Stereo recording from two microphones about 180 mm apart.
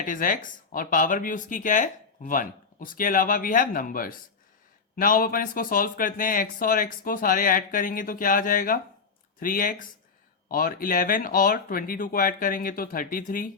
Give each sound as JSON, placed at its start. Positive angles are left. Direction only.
{"t": 0.0, "sound": "speech", "side_deg": 50}